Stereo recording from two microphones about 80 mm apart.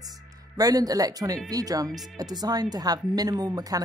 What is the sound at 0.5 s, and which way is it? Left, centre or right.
Speech, right.